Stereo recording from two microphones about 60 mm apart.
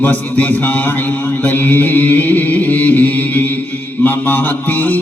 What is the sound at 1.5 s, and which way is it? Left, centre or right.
Mantra, left.